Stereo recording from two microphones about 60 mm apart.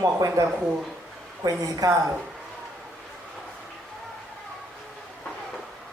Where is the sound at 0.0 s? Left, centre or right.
Right.